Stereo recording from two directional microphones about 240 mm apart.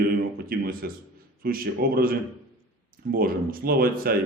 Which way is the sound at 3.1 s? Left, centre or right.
Right.